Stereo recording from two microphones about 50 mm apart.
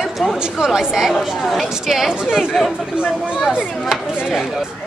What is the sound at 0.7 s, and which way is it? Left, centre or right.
Speech, centre.